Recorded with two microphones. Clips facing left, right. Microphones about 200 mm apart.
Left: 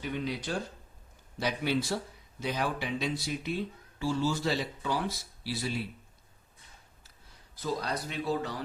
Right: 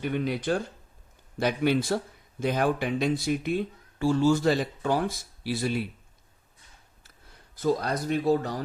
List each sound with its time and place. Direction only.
0.0 s speech: 55° right (ahead or behind)
7.5 s speech: 50° right (ahead or behind)